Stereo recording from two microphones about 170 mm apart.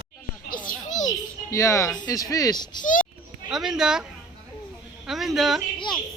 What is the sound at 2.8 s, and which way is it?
Children playing, 50° left (ahead or behind).